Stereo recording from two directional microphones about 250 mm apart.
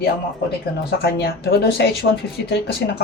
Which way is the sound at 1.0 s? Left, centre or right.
Left.